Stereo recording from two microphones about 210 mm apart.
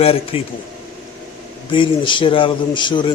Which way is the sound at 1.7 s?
25° left (ahead or behind).